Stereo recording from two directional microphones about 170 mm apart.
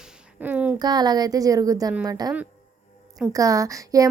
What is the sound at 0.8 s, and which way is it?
A woman's voice, 25° right (ahead or behind).